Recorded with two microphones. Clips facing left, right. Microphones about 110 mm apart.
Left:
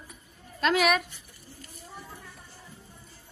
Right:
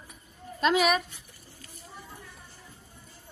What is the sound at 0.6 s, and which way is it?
Speech, centre (ahead or behind).